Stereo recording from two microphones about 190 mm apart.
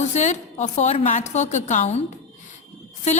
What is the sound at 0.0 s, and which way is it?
A woman's voice, 40° left (ahead or behind).